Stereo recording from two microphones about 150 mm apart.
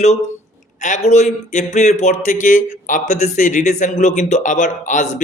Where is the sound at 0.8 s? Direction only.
55° left (ahead or behind).